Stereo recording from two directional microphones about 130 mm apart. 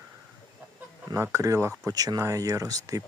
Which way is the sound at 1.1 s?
25° right (ahead or behind).